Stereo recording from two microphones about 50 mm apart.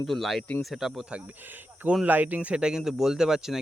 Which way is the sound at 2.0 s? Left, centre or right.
Right.